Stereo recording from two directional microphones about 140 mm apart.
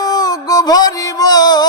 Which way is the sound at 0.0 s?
25° left (ahead or behind).